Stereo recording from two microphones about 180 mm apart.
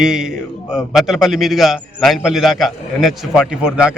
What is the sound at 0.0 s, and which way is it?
Speech, 5° right (ahead or behind).